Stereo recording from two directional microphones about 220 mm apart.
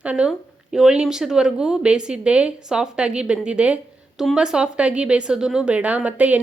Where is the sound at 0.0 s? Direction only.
5° right (ahead or behind).